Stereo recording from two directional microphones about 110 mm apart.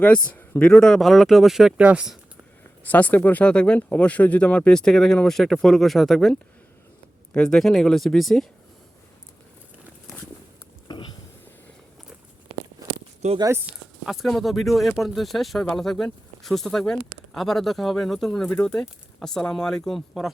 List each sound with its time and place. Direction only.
0.0 s speech: 15° left (ahead or behind); by 2.1 s 10° right (ahead or behind)
2.8 s speech: 15° left (ahead or behind)
7.3 s speech: 5° left (ahead or behind)
10.8 s a sound: 45° left (ahead or behind)
12.9 s a sound: 55° right (ahead or behind)
14.0 s speech: centre (ahead or behind)